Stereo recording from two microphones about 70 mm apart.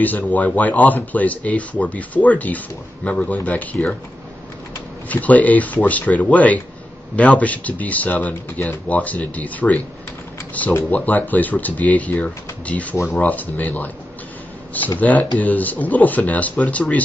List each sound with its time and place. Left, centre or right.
0.0 s speech: left
5.0 s speech: left
15.0 s speech: left